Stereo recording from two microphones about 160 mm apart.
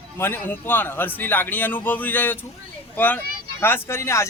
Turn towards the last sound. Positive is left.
turn(degrees=15)  # may be behind; listen again after turning